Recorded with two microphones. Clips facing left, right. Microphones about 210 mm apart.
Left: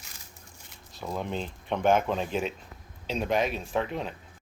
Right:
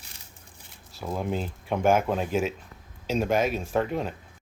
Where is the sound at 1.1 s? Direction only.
5° right (ahead or behind).